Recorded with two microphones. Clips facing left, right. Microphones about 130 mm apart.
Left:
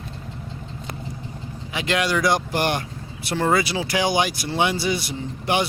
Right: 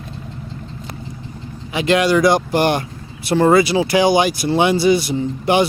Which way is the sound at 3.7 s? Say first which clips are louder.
Right 7 dB; 25° right (ahead or behind).